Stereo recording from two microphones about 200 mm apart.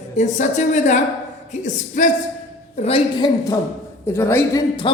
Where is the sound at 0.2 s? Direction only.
35° left (ahead or behind).